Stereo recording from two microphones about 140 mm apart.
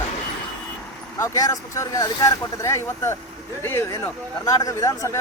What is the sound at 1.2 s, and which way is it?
Speech, 25° left (ahead or behind).